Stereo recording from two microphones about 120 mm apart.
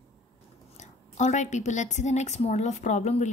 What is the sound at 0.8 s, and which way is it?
Speech, 80° left.